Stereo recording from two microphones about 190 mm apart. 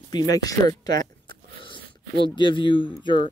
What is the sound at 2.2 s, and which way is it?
Speech, 25° left (ahead or behind).